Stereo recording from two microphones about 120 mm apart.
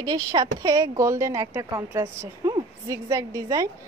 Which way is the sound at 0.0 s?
30° right (ahead or behind).